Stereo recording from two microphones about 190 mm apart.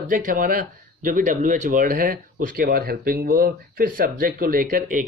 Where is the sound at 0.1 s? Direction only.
45° right (ahead or behind).